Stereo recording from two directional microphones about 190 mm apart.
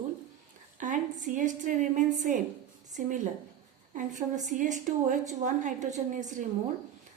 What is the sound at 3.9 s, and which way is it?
A woman's voice, 40° right (ahead or behind).